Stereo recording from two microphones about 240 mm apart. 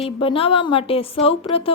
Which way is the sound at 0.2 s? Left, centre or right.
Left.